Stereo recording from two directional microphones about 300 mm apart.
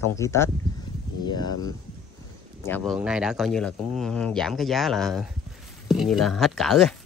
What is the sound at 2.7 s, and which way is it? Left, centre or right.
Speech, centre.